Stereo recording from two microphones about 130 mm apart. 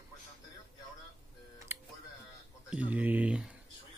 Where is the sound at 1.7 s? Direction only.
20° right (ahead or behind).